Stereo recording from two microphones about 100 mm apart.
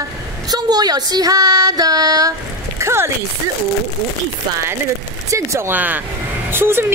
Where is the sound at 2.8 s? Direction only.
25° right (ahead or behind).